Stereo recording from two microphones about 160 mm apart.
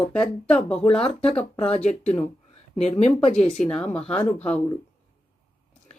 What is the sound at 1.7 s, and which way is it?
Speech, 40° left (ahead or behind).